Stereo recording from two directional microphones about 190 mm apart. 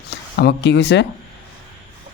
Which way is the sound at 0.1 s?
60° left (ahead or behind).